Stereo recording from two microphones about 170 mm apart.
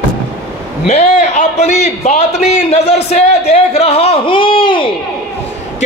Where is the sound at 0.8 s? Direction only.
40° left (ahead or behind).